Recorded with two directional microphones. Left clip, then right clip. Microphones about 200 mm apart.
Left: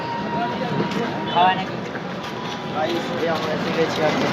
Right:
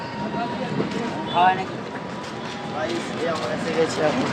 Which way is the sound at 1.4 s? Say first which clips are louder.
Left 1 dB; 35° right (ahead or behind).